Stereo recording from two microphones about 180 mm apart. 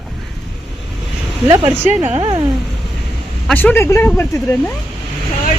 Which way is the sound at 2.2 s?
25° right (ahead or behind).